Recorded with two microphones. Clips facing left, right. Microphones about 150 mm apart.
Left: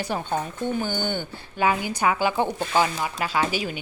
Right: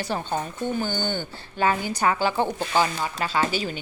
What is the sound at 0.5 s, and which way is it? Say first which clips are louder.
Speech: left 1 dB; 5° right (ahead or behind).